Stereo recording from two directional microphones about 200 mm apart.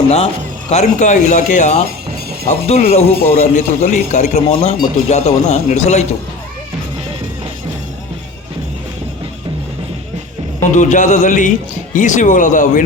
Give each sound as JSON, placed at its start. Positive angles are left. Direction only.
{"t": 0.7, "sound": "a man's voice", "side_deg": 35}
{"t": 10.6, "sound": "a man's voice", "side_deg": 40}